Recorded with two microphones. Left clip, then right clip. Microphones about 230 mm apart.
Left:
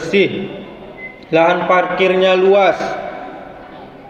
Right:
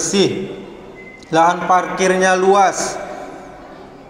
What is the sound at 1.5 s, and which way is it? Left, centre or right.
A man's voice, centre.